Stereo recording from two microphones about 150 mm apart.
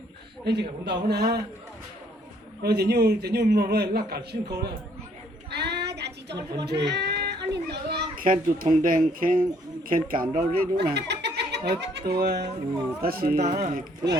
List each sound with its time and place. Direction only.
0.4 s a man's voice: 90° right
2.6 s a man's voice: 90° right
5.5 s child singing: 90° right
6.7 s children playing: 90° right; by 9.4 s 65° right (ahead or behind)
9.9 s speech: 70° right (ahead or behind); by 12.5 s 90° right
13.0 s speech: 80° right
13.4 s a man's voice: 90° right